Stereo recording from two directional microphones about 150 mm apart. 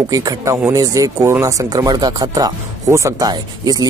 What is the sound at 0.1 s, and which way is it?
Speech, 20° right (ahead or behind).